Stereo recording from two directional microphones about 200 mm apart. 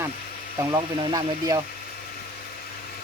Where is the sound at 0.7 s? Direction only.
20° right (ahead or behind).